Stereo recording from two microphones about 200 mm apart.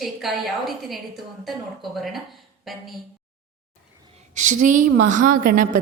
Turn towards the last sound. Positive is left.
turn(degrees=-45)  # may be behind; listen again after turning